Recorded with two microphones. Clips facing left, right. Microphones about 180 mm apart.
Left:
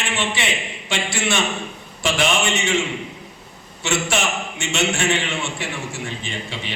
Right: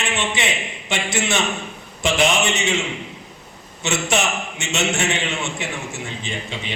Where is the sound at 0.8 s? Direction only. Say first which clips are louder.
Right 1 dB; 20° right (ahead or behind).